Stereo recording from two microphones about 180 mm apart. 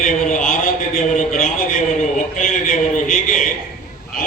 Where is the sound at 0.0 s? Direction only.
45° left (ahead or behind).